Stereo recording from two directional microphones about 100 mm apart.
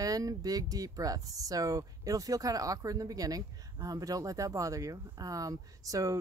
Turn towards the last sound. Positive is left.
turn(degrees=-35)  # may be behind; listen again after turning